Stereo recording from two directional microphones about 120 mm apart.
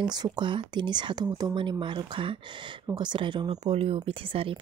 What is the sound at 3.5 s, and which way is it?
Speech, 55° right (ahead or behind).